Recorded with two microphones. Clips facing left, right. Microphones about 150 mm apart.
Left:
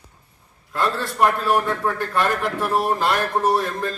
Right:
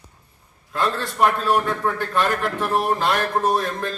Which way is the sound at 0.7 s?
Centre (ahead or behind).